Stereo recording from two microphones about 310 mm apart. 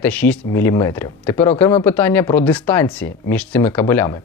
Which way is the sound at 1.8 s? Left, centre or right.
Centre.